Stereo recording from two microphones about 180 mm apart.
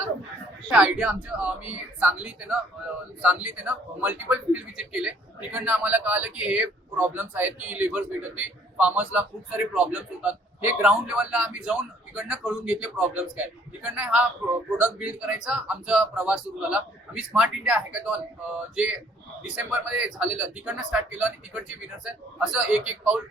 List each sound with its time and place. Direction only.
0.7 s a man's voice: 5° right (ahead or behind)
19.4 s a man's voice: 5° right (ahead or behind)